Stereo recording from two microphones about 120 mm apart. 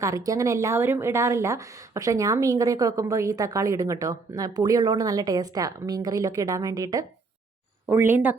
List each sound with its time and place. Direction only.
0.0 s a woman's voice: 25° right (ahead or behind)
7.9 s speech: 20° right (ahead or behind)